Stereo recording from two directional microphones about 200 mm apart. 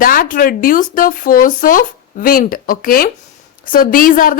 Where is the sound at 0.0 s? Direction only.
45° left (ahead or behind).